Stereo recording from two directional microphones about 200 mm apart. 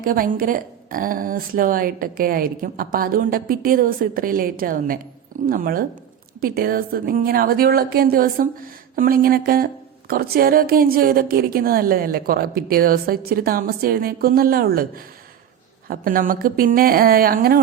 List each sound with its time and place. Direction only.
0.0 s speech: 45° right (ahead or behind)